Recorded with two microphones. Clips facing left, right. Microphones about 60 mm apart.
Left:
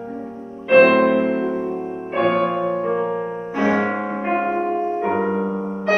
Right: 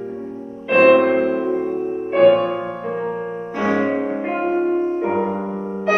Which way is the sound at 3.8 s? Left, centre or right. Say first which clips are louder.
Right 2 dB; left.